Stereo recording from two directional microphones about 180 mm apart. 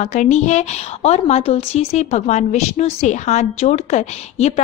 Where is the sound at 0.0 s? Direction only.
40° left (ahead or behind).